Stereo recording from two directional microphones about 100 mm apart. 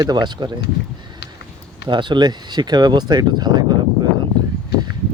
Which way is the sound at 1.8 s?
50° right (ahead or behind).